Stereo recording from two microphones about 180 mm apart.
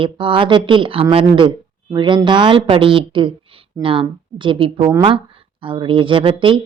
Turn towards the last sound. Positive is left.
turn(degrees=-30)  # may be behind; listen again after turning